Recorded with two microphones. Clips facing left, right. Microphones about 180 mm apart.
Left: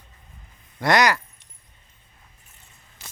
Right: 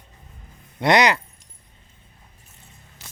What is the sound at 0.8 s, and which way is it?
Speech, 20° right (ahead or behind).